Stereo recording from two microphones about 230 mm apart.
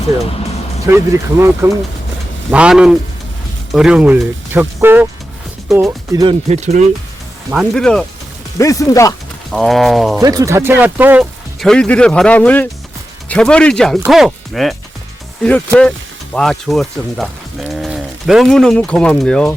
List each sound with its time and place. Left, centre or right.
0.9 s speech: centre
6.5 s speech: right
7.5 s speech: centre
8.5 s speech: centre
9.5 s speech: centre
10.2 s speech: centre